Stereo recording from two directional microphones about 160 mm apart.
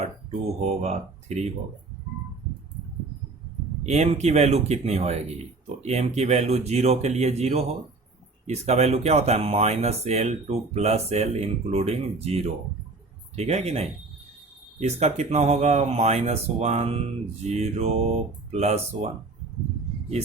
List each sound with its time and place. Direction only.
0.8 s speech: 45° right (ahead or behind)
3.8 s speech: 45° right (ahead or behind)